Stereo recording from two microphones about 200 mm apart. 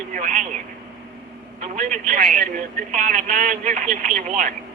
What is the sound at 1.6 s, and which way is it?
Speech, 40° right (ahead or behind).